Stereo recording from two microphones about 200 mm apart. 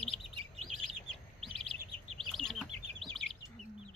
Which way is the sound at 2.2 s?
Centre (ahead or behind).